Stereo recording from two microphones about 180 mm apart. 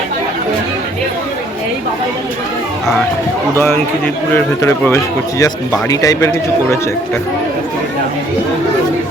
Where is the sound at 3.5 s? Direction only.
15° left (ahead or behind).